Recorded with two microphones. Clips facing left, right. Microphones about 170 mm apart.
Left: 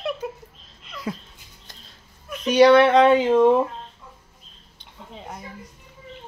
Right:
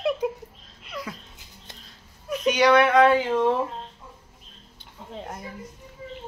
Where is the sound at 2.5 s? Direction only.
30° left (ahead or behind); by 3.6 s 15° left (ahead or behind).